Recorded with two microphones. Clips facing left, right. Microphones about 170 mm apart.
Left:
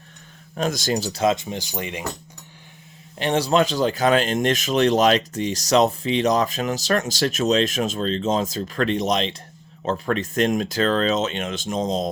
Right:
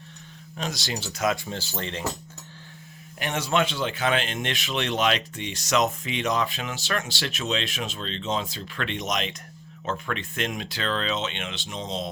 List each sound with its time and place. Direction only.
0.5 s speech: 50° left (ahead or behind); by 2.0 s 15° left (ahead or behind)
3.2 s speech: 30° left (ahead or behind)